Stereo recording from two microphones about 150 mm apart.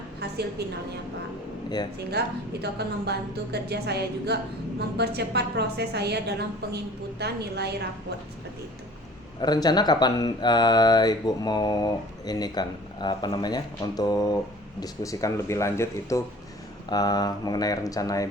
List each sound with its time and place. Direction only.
2.0 s a woman's voice: 90° right
9.4 s speech: 25° left (ahead or behind)